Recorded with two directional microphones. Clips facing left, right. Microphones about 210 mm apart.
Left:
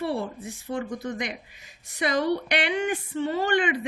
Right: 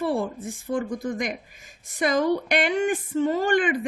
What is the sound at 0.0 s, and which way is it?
A woman's voice, 45° right (ahead or behind).